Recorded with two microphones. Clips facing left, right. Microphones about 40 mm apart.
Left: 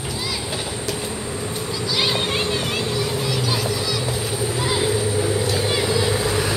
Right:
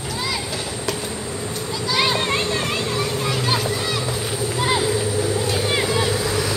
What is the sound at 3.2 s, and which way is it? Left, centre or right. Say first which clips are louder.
Music: right 1 dB; right.